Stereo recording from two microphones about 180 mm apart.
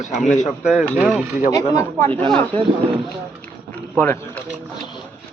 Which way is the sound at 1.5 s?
15° left (ahead or behind).